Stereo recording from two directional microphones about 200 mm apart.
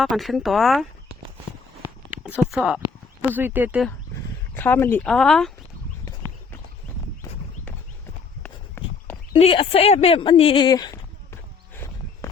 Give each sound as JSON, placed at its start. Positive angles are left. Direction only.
{"t": 0.0, "sound": "speech", "side_deg": 0}
{"t": 2.0, "sound": "speech", "side_deg": -5}
{"t": 3.8, "sound": "speech", "side_deg": 10}
{"t": 8.4, "sound": "run", "side_deg": 10}
{"t": 9.3, "sound": "speech", "side_deg": 30}
{"t": 12.2, "sound": "walk", "side_deg": 15}